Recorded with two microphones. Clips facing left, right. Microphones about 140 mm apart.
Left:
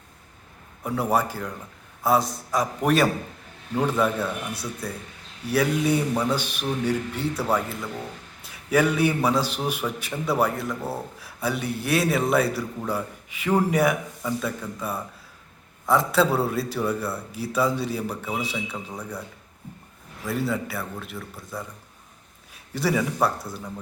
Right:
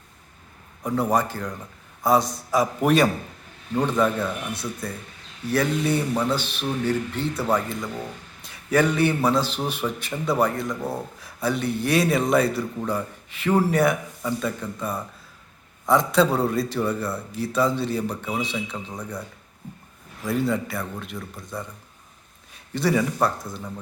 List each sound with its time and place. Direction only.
0.8 s a man's voice: 5° left (ahead or behind)
20.2 s speech: 5° left (ahead or behind)